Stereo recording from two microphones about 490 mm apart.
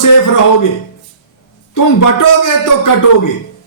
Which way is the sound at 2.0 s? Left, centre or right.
Left.